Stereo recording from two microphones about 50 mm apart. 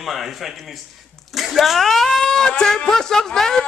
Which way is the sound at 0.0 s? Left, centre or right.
Centre.